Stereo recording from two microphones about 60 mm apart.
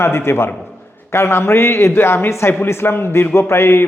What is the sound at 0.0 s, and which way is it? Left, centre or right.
A man's voice, left.